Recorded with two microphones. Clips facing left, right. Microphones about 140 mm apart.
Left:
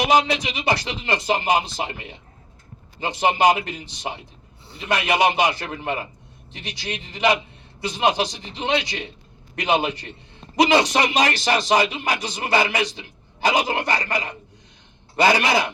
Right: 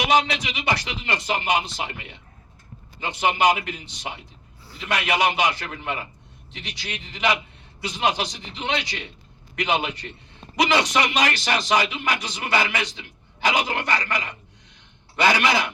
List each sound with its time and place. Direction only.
0.1 s a man's voice: 35° left (ahead or behind)
4.6 s a sound: 25° left (ahead or behind)
5.0 s a man's voice: 35° left (ahead or behind)